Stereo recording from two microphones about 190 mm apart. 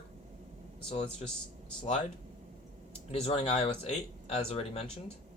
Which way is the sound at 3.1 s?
30° left (ahead or behind).